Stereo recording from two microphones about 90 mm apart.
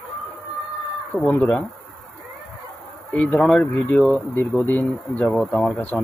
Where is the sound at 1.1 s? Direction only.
20° left (ahead or behind).